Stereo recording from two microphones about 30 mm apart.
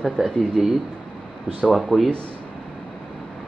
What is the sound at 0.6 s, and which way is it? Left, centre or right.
Speech, centre.